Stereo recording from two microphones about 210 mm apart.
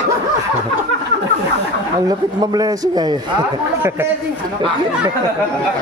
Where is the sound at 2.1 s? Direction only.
20° right (ahead or behind).